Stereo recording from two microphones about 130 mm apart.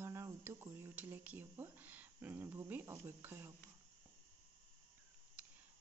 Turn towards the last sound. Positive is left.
turn(degrees=-10)  # may be behind; listen again after turning